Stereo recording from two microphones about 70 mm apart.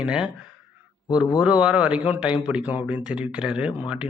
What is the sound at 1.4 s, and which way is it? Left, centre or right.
A man's voice, centre.